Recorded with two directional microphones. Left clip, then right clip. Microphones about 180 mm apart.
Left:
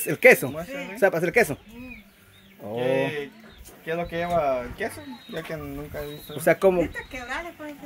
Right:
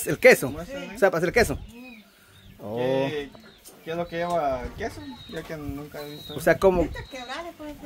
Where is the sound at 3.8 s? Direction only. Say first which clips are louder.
Left 1 dB; 30° left (ahead or behind).